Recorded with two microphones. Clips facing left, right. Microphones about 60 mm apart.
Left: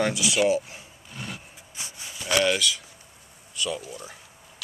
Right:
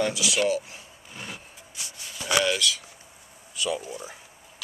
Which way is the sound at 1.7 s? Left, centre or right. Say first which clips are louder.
Left 2 dB; left.